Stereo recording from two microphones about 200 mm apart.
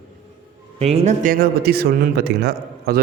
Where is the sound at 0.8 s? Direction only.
30° right (ahead or behind); by 3.0 s 55° right (ahead or behind).